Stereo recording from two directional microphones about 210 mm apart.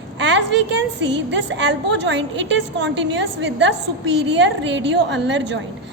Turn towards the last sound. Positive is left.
turn(degrees=-60)  # may be behind; listen again after turning